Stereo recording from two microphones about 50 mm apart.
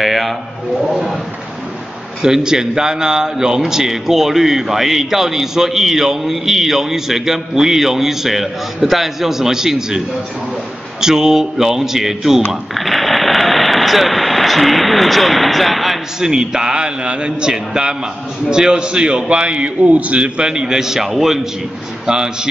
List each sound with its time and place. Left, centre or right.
0.0 s a sound: centre
0.7 s speech: centre
2.2 s a man's voice: centre